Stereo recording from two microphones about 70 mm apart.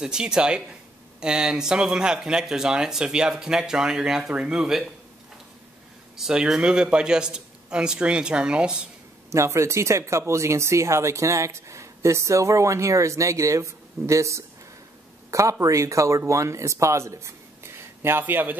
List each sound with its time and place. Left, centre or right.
0.0 s speech: centre
6.1 s speech: centre
9.3 s speech: right
15.6 s speech: right